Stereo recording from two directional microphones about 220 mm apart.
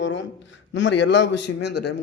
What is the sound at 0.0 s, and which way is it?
A man's voice, 60° left (ahead or behind).